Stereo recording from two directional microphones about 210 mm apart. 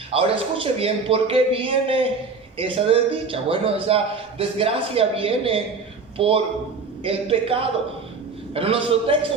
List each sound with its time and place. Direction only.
0.1 s a man's voice: 25° right (ahead or behind)